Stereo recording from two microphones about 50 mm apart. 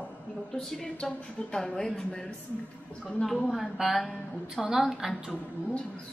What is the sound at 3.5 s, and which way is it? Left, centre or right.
A woman's voice, centre.